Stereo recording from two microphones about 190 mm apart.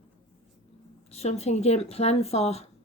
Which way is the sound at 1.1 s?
35° left (ahead or behind).